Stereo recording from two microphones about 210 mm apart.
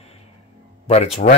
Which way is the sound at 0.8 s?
30° left (ahead or behind).